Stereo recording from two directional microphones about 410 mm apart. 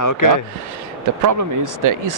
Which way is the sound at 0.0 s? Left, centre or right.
Left.